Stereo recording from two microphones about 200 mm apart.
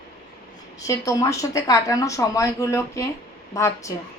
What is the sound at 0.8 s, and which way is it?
Speech, 15° left (ahead or behind).